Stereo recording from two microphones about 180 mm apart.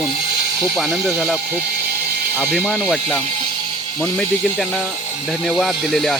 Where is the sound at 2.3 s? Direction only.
10° right (ahead or behind).